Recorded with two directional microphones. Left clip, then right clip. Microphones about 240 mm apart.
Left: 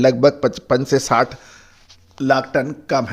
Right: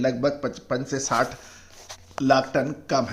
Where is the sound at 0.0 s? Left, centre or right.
Left.